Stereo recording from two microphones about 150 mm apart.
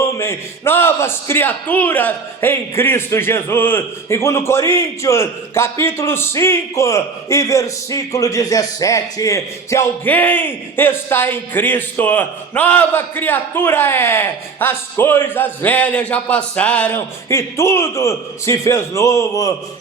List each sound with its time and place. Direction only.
0.0 s a man's voice: 15° left (ahead or behind)